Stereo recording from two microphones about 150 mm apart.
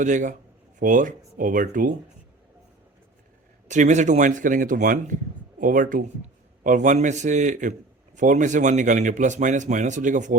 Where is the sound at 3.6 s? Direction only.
55° right (ahead or behind).